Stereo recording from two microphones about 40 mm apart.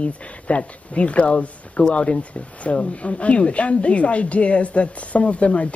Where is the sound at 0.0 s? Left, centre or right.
Left.